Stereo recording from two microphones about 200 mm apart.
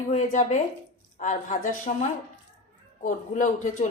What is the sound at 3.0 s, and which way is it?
Speech, 40° left (ahead or behind).